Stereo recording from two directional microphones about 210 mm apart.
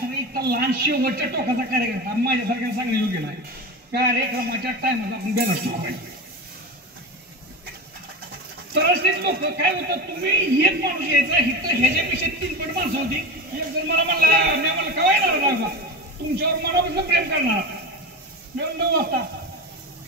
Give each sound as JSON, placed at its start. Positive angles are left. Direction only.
{"t": 0.3, "sound": "a man's voice", "side_deg": -50}
{"t": 8.7, "sound": "a man's voice", "side_deg": -50}